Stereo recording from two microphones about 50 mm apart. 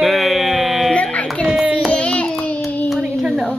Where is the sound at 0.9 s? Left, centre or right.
Left.